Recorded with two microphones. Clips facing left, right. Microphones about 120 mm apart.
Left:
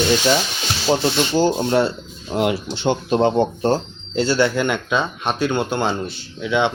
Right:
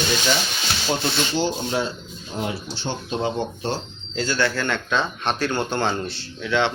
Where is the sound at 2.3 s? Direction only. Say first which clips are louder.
Left 8 dB; 90° left.